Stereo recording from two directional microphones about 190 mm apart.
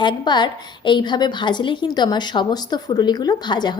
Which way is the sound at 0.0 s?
25° left (ahead or behind).